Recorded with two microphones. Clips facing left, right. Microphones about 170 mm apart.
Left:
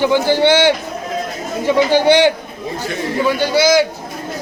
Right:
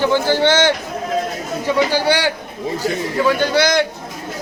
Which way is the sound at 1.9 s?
20° left (ahead or behind).